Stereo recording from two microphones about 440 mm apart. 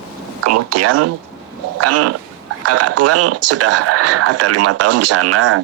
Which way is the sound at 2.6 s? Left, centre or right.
Right.